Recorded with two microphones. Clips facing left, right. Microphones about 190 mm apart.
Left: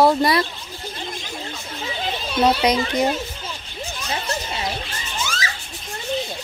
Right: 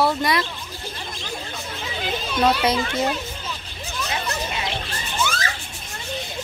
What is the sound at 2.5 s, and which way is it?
Speech, 20° left (ahead or behind).